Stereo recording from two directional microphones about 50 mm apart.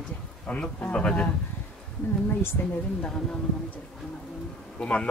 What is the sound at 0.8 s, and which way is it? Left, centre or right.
Speech, left.